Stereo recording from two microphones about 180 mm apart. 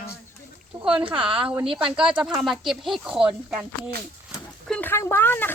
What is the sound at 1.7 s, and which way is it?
Speech, 30° right (ahead or behind).